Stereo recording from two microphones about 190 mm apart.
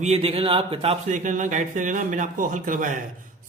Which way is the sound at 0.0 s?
35° right (ahead or behind).